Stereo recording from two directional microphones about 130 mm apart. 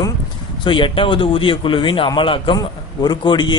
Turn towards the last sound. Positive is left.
turn(degrees=35)  # may be behind; listen again after turning